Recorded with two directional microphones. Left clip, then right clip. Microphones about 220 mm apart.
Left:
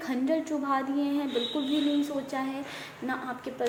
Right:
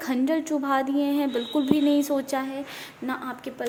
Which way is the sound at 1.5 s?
45° right (ahead or behind).